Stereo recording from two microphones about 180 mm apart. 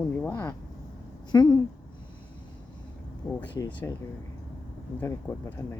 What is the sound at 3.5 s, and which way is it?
Speech, 25° left (ahead or behind).